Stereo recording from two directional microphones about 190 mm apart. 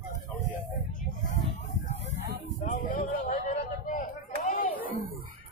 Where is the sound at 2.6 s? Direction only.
45° left (ahead or behind).